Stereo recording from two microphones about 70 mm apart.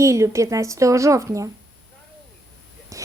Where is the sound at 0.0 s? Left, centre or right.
Right.